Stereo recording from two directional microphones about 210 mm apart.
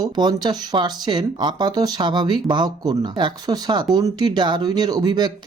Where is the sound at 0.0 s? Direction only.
20° right (ahead or behind).